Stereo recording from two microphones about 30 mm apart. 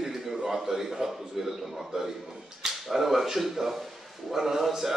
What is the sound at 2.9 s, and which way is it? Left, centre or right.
Speech, centre.